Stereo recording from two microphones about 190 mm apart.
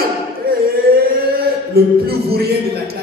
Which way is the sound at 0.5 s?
50° right (ahead or behind).